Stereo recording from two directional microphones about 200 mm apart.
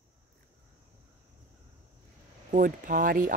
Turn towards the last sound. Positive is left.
turn(degrees=-45)  # may be behind; listen again after turning